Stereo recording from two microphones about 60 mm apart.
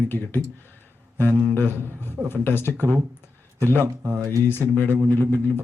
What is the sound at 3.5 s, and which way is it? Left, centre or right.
Speech, left.